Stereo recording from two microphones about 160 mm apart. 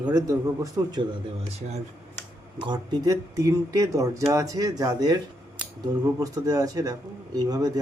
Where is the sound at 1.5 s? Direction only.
45° right (ahead or behind).